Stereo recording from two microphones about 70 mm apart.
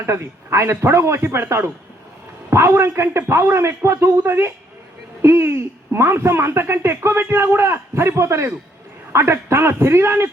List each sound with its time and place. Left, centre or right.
0.0 s speech: right